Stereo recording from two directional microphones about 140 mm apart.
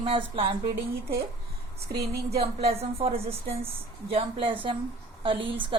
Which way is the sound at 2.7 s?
45° right (ahead or behind).